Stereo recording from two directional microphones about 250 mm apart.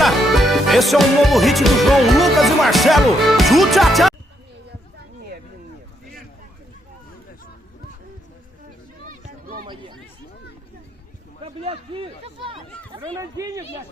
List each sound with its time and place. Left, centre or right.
0.0 s music: centre
9.0 s run: right
9.6 s chatter: centre
11.6 s chatter: right